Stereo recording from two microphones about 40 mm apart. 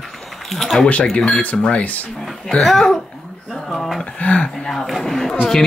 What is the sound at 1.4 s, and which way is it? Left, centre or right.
Speech, left.